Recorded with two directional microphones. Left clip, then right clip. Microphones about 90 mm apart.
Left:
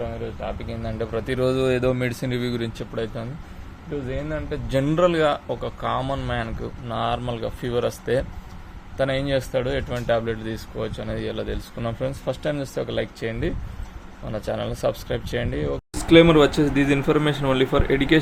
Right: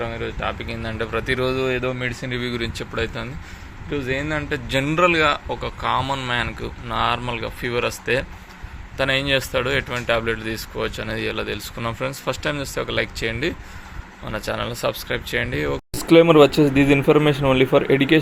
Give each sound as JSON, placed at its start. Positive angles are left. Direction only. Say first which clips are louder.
{"t": 0.0, "sound": "speech", "louder": "right 3 dB", "side_deg": -25}
{"t": 0.6, "sound": "speech", "louder": "right 2 dB", "side_deg": 10}
{"t": 1.4, "sound": "speech", "louder": "left 4 dB", "side_deg": 65}
{"t": 2.2, "sound": "speech", "louder": "right 1 dB", "side_deg": 85}
{"t": 2.9, "sound": "speech", "louder": "right 4 dB", "side_deg": 15}
{"t": 3.9, "sound": "speech", "louder": "right 5 dB", "side_deg": -15}
{"t": 4.7, "sound": "speech", "louder": "right 2 dB", "side_deg": 35}
{"t": 7.3, "sound": "speech", "louder": "right 1 dB", "side_deg": 40}
{"t": 9.0, "sound": "speech", "louder": "right 3 dB", "side_deg": 25}
{"t": 10.8, "sound": "speech", "louder": "right 3 dB", "side_deg": 10}
{"t": 16.0, "sound": "speech", "louder": "right 2 dB", "side_deg": -25}